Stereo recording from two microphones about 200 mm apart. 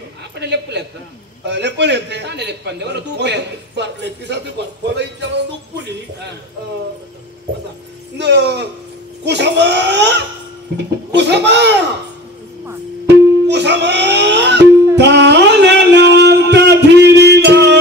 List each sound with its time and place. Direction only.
0.4 s a man's voice: 60° right (ahead or behind)
8.2 s a man's voice: 60° right (ahead or behind)
13.5 s music: 60° right (ahead or behind)
15.0 s a sound: 60° right (ahead or behind)